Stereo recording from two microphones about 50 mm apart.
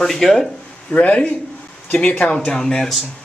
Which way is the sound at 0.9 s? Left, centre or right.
Left.